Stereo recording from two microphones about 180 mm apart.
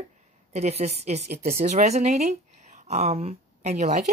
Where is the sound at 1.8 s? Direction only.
40° right (ahead or behind).